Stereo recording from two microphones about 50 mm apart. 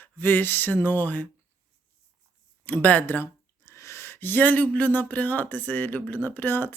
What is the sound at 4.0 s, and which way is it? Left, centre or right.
Speech, left.